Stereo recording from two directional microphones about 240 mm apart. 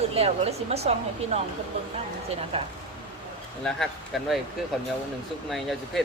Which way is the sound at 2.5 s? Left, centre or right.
Right.